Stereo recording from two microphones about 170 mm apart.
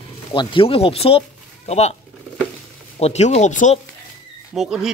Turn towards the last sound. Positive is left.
turn(degrees=-5)  # may be behind; listen again after turning